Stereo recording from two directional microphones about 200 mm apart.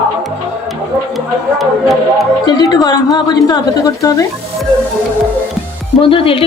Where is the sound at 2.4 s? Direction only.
20° left (ahead or behind).